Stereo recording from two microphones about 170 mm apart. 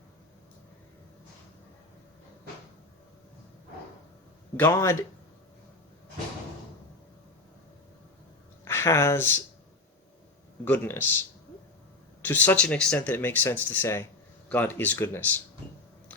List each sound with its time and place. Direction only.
4.5 s speech: 15° left (ahead or behind)
8.6 s speech: 15° left (ahead or behind)
10.7 s speech: 10° left (ahead or behind)
12.2 s speech: 10° left (ahead or behind)